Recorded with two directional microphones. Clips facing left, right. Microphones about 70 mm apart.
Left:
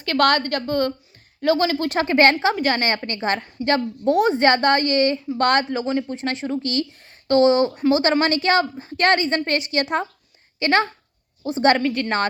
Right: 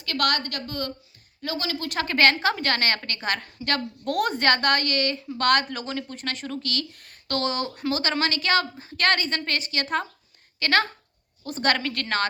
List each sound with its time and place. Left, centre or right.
0.0 s a woman's voice: left
2.4 s a woman's voice: centre; by 5.6 s left
5.7 s speech: left
10.6 s speech: centre
11.8 s a woman's voice: centre